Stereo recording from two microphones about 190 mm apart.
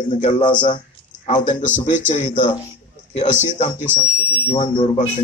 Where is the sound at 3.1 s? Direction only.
35° left (ahead or behind).